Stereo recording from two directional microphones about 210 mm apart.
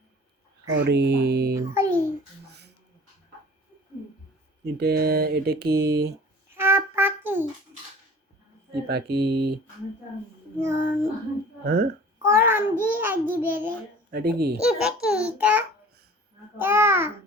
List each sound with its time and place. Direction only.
0.7 s speech: 55° right (ahead or behind)
1.5 s a child's voice: 10° right (ahead or behind)
2.5 s a sound: 50° right (ahead or behind)
4.6 s speech: 50° right (ahead or behind)
6.5 s music: 10° right (ahead or behind)
8.9 s speech: 50° right (ahead or behind)
10.6 s a child's voice: 10° right (ahead or behind)
11.6 s speech: 50° right (ahead or behind)
12.2 s a child's voice: 10° right (ahead or behind)
14.1 s speech: 50° right (ahead or behind)
14.6 s a child's voice: 5° right (ahead or behind)